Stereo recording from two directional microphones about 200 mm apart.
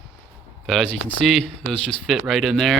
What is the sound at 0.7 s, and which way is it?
A man's voice, 5° left (ahead or behind).